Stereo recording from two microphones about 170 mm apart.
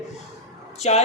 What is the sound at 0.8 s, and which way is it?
Speech, 40° left (ahead or behind).